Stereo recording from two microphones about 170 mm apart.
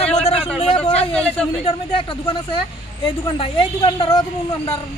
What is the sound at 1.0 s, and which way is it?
Speech, 5° left (ahead or behind).